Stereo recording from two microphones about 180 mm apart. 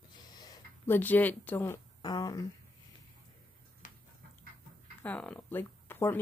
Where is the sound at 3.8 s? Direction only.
45° left (ahead or behind).